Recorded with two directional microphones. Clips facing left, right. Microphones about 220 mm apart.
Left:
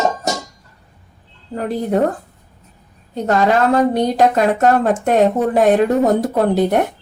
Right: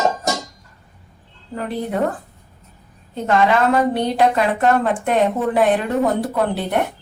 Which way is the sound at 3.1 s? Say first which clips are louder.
Left 2 dB; 40° left (ahead or behind).